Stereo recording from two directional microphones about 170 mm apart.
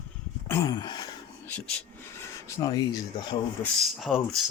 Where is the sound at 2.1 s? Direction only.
15° left (ahead or behind).